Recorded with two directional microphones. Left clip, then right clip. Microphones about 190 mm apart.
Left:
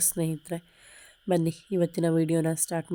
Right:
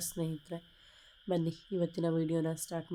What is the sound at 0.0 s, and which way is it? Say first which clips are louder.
A woman's voice: left 8 dB; 40° left (ahead or behind).